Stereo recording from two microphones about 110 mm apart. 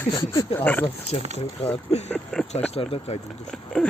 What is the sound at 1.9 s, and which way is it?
Speech, 75° left (ahead or behind).